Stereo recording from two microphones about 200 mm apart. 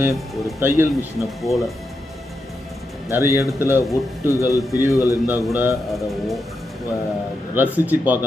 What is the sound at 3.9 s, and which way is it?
Speech, 15° left (ahead or behind).